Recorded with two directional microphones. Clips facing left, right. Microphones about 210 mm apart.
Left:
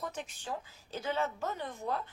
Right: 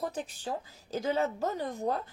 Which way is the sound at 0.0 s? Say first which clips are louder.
Right 5 dB; 35° right (ahead or behind).